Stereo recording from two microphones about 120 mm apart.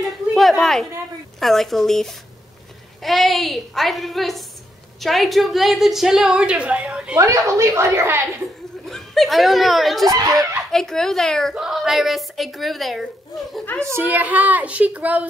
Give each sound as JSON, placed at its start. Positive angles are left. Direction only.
{"t": 0.3, "sound": "a woman's voice", "side_deg": 0}
{"t": 7.2, "sound": "a woman's voice", "side_deg": -25}
{"t": 8.8, "sound": "a woman's voice", "side_deg": 0}
{"t": 10.0, "sound": "a woman's voice", "side_deg": -30}
{"t": 10.7, "sound": "a woman's voice", "side_deg": 5}
{"t": 13.9, "sound": "a woman's voice", "side_deg": -15}